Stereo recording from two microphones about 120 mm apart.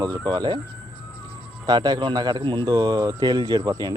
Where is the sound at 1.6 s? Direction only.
35° right (ahead or behind).